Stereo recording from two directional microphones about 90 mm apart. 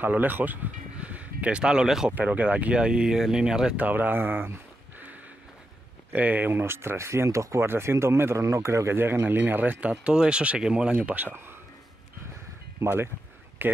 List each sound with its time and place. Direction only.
0.0 s speech: 20° right (ahead or behind)
6.1 s speech: 20° right (ahead or behind)
12.8 s speech: 25° right (ahead or behind)